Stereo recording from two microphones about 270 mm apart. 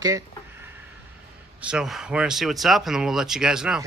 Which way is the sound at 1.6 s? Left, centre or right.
Centre.